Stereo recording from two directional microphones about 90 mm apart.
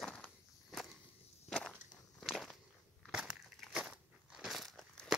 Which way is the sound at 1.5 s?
10° left (ahead or behind).